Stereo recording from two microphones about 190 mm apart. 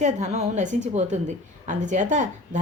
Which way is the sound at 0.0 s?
35° right (ahead or behind).